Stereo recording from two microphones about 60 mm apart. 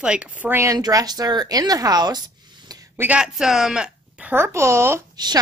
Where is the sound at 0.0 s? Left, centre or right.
Centre.